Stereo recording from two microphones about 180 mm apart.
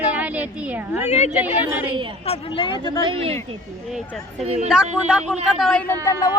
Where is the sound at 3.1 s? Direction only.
30° right (ahead or behind).